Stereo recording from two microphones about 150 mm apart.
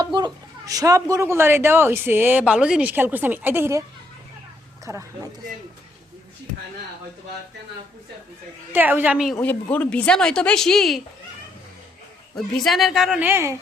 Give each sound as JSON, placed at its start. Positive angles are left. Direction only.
{"t": 0.0, "sound": "a man's voice", "side_deg": -30}
{"t": 4.9, "sound": "speech", "side_deg": -20}
{"t": 8.7, "sound": "a man's voice", "side_deg": -15}
{"t": 9.7, "sound": "speech", "side_deg": 10}
{"t": 12.4, "sound": "speech", "side_deg": 0}